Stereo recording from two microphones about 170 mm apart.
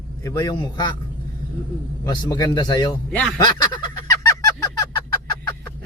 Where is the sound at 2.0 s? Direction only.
20° left (ahead or behind).